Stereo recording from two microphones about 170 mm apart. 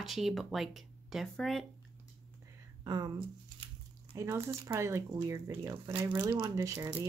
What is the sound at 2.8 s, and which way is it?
Speech, 20° right (ahead or behind).